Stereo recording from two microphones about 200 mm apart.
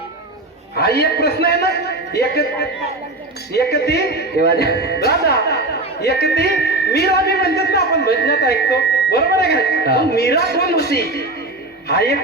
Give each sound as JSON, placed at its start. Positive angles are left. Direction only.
{"t": 0.8, "sound": "a man's voice", "side_deg": 55}